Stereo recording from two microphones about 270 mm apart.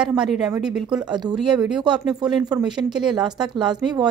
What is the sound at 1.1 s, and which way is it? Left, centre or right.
Speech, centre.